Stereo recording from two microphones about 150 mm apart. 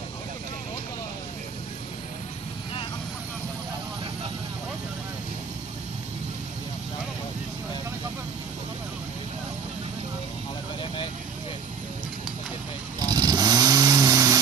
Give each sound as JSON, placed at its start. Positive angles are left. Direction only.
{"t": 13.0, "sound": "chainsaw", "side_deg": -25}